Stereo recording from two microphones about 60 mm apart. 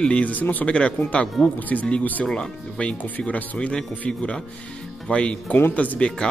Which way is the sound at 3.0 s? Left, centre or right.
Left.